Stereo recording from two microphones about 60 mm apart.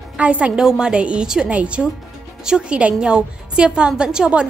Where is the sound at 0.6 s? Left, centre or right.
Centre.